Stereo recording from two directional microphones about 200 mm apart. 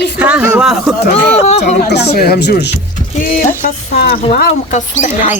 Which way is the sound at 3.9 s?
50° left (ahead or behind).